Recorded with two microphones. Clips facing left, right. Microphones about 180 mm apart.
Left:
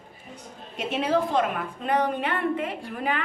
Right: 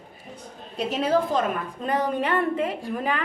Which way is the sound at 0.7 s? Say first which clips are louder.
Right 2 dB; 40° right (ahead or behind).